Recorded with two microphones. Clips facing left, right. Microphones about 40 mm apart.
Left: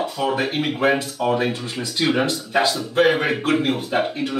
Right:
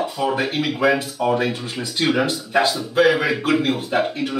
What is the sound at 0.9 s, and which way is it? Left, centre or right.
Speech, centre.